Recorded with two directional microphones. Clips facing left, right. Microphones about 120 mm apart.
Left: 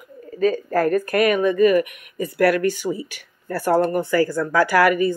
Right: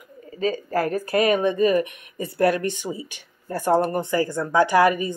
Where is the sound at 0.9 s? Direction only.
60° left (ahead or behind).